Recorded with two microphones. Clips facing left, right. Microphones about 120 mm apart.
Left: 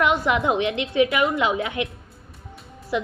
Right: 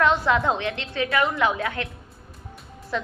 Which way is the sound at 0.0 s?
15° left (ahead or behind).